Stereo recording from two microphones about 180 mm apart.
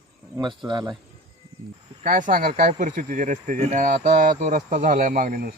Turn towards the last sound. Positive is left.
turn(degrees=-50)  # may be behind; listen again after turning